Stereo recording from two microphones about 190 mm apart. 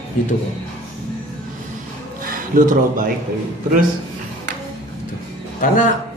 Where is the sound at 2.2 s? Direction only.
45° right (ahead or behind).